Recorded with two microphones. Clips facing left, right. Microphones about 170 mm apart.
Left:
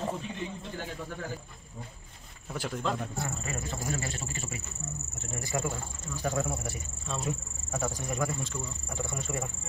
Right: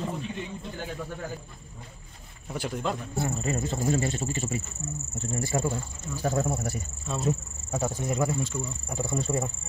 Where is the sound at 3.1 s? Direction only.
30° right (ahead or behind).